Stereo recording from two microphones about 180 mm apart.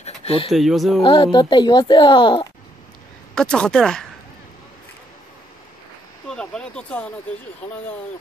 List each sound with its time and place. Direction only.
0.0 s a sound: 35° left (ahead or behind)
0.5 s speech: centre (ahead or behind)
1.0 s a child's voice: 25° left (ahead or behind)
3.3 s speech: 5° left (ahead or behind)
6.2 s speech: 5° left (ahead or behind)